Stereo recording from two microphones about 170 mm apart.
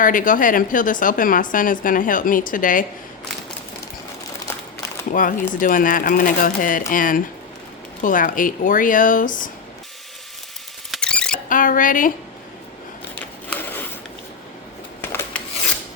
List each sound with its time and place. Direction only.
0.0 s a woman's voice: 50° left (ahead or behind)
5.1 s a woman's voice: 50° left (ahead or behind)
10.9 s rodents: 5° left (ahead or behind)
11.4 s a sound: 50° left (ahead or behind)
13.5 s a sound: 10° left (ahead or behind)
15.0 s rub: 10° left (ahead or behind)